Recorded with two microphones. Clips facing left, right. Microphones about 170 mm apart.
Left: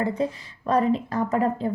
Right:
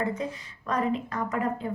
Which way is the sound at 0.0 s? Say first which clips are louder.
Left 5 dB; 35° left (ahead or behind).